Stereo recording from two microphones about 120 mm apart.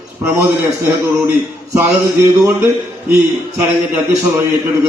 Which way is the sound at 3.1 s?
15° right (ahead or behind).